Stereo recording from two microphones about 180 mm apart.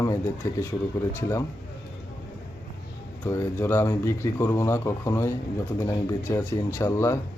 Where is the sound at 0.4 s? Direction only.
15° left (ahead or behind).